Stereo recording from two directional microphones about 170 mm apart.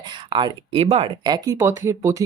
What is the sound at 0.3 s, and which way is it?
Speech, 30° right (ahead or behind).